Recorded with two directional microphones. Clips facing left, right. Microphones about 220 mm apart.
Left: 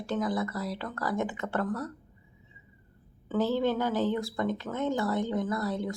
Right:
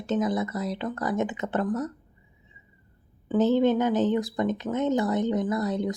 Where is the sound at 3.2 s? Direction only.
20° right (ahead or behind).